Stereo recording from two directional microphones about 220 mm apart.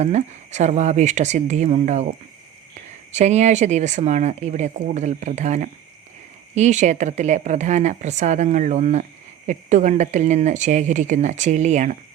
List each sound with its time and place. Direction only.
0.0 s speech: 30° right (ahead or behind)
3.1 s speech: 30° right (ahead or behind)